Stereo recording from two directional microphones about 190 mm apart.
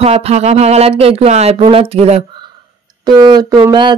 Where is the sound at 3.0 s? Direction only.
20° right (ahead or behind).